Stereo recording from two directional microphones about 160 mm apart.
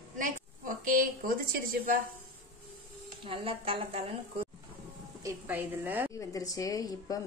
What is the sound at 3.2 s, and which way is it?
Speech, 35° right (ahead or behind).